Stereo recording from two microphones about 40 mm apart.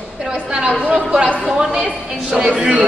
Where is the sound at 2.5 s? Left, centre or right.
Right.